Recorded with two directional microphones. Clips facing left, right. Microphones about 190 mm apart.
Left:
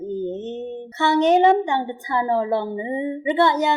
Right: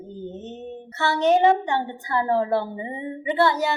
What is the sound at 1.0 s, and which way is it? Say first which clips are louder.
A woman's voice: left 3 dB; 15° left (ahead or behind).